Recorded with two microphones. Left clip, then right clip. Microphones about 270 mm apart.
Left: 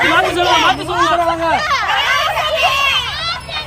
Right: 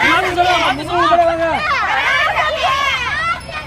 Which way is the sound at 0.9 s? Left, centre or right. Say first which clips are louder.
Right 1 dB; centre.